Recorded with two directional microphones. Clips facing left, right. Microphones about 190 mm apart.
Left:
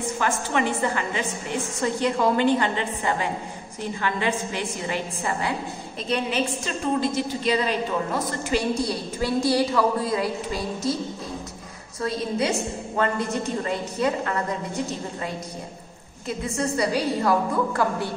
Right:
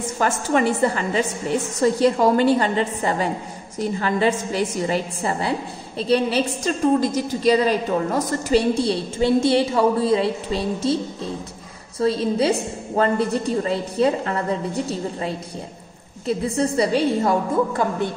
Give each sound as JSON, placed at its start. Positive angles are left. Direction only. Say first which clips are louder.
{"t": 0.2, "sound": "a woman's voice", "louder": "right 6 dB", "side_deg": -40}
{"t": 12.0, "sound": "a woman's voice", "louder": "right 6 dB", "side_deg": -30}
{"t": 16.3, "sound": "a woman's voice", "louder": "right 5 dB", "side_deg": -30}